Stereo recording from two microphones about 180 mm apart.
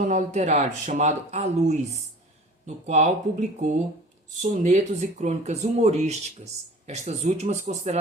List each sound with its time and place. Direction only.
0.0 s speech: 40° right (ahead or behind)